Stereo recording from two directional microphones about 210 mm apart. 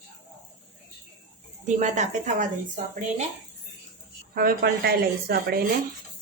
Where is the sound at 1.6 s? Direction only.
35° right (ahead or behind).